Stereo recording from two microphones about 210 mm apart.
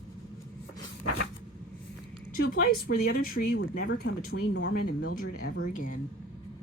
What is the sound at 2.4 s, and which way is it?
Speech, 45° left (ahead or behind).